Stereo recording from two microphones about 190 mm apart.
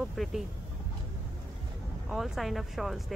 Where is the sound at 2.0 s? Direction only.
Centre (ahead or behind).